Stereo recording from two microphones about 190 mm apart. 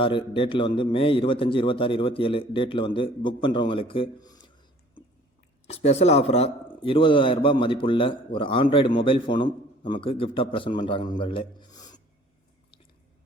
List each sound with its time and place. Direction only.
0.0 s a man's voice: 25° left (ahead or behind)
5.6 s a man's voice: 35° left (ahead or behind)